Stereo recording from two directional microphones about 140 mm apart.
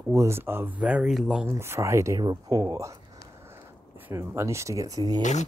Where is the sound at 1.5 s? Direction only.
20° right (ahead or behind).